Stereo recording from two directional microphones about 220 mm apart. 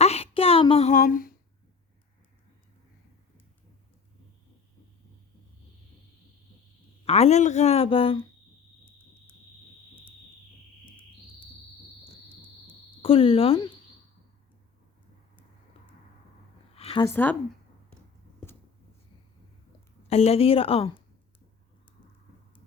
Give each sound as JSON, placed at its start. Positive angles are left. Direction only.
{"t": 0.0, "sound": "a sound", "side_deg": 30}
{"t": 7.0, "sound": "speech", "side_deg": 30}
{"t": 13.0, "sound": "speech", "side_deg": 25}
{"t": 16.7, "sound": "a sound", "side_deg": 25}
{"t": 17.1, "sound": "speech", "side_deg": 10}
{"t": 20.1, "sound": "speech", "side_deg": 30}